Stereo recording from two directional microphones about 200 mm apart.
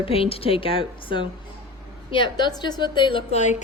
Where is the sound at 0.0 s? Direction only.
30° left (ahead or behind).